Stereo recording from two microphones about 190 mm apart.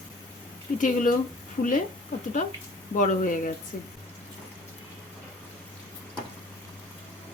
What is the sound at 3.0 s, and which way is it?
Speech, 45° left (ahead or behind).